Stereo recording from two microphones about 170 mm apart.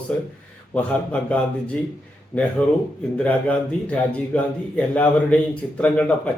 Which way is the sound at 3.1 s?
10° left (ahead or behind).